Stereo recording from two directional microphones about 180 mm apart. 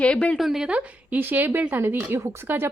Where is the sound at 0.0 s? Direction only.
5° left (ahead or behind).